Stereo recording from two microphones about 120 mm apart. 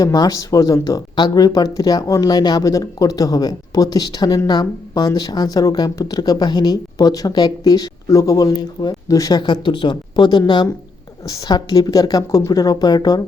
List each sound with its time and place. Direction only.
0.0 s speech: 30° left (ahead or behind)